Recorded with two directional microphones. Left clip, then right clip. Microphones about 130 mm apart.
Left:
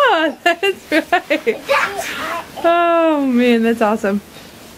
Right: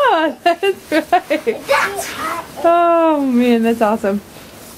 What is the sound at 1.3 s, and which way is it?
Speech, 25° left (ahead or behind).